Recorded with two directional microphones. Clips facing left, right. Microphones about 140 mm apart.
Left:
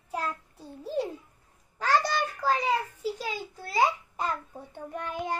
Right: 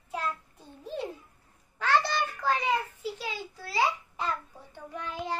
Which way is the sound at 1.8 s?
40° left (ahead or behind).